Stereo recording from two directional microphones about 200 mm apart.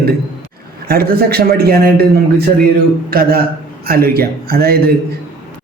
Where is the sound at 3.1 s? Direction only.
50° right (ahead or behind).